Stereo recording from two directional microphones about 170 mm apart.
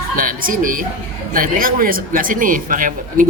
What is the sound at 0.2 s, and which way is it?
A woman's voice, 55° right (ahead or behind).